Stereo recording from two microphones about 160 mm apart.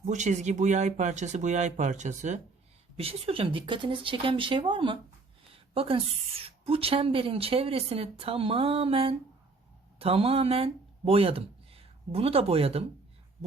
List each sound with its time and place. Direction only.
0.0 s speech: 50° right (ahead or behind)
3.0 s a woman's voice: 35° right (ahead or behind)